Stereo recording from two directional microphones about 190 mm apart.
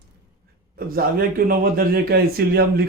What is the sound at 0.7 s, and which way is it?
Speech, 50° right (ahead or behind).